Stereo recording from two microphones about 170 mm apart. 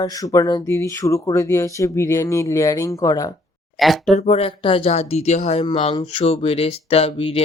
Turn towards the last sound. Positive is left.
turn(degrees=35)  # may be behind; listen again after turning